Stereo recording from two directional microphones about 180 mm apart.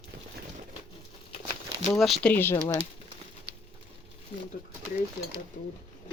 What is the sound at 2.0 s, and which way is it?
Speech, centre (ahead or behind).